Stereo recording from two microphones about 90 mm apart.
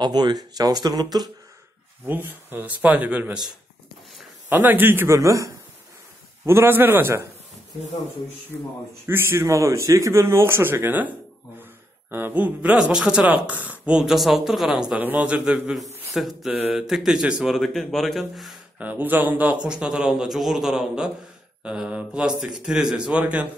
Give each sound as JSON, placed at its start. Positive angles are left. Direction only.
{"t": 0.0, "sound": "speech", "side_deg": -55}
{"t": 2.0, "sound": "speech", "side_deg": -20}
{"t": 4.5, "sound": "a man's voice", "side_deg": -20}
{"t": 5.1, "sound": "a man's voice", "side_deg": -35}
{"t": 8.5, "sound": "a man's voice", "side_deg": 15}
{"t": 9.0, "sound": "a man's voice", "side_deg": -25}
{"t": 15.0, "sound": "speech", "side_deg": -20}
{"t": 18.8, "sound": "speech", "side_deg": -20}